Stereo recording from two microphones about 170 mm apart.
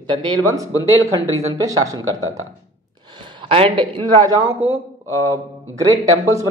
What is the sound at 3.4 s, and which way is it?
Speech, 30° right (ahead or behind).